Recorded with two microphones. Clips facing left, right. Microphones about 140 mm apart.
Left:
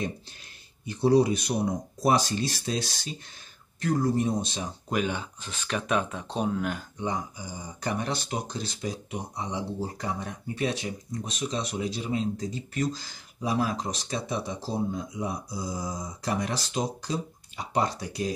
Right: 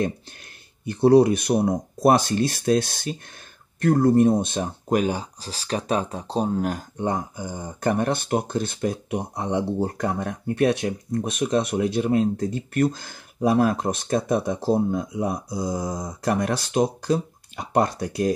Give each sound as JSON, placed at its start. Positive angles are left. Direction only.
{"t": 0.8, "sound": "speech", "side_deg": -60}